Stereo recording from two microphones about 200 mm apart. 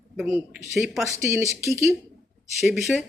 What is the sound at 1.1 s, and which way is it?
Speech, 15° right (ahead or behind).